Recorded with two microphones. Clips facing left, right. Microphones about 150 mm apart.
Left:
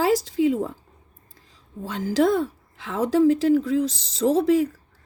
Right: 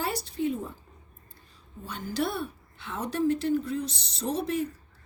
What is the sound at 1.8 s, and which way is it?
A woman's voice, 90° left.